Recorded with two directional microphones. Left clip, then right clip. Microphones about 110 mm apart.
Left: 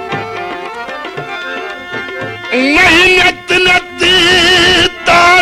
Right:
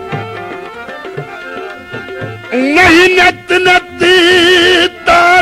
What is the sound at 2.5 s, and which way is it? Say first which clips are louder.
Speech: right 1 dB; 15° right (ahead or behind).